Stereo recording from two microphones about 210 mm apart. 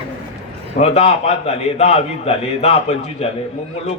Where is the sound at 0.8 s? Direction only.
30° left (ahead or behind).